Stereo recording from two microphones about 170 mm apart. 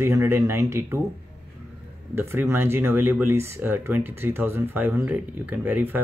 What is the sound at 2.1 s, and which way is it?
Speech, 15° right (ahead or behind).